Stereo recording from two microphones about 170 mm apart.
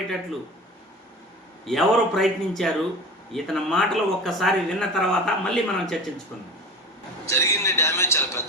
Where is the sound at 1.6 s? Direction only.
Centre (ahead or behind).